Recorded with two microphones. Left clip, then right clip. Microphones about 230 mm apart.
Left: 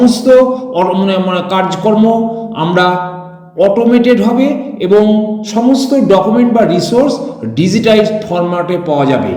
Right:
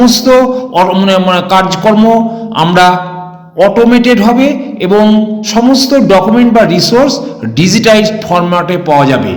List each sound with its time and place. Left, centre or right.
0.0 s a man's voice: right